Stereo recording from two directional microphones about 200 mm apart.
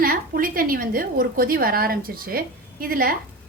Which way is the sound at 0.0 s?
45° right (ahead or behind).